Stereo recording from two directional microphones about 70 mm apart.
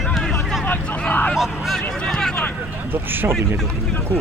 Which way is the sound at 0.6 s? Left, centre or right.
Left.